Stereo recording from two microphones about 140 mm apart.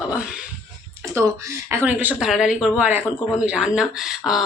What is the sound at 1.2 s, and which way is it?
Speech, 20° right (ahead or behind).